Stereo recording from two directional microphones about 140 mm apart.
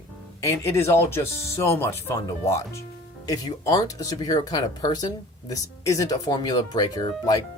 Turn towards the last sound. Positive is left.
turn(degrees=30)  # may be behind; listen again after turning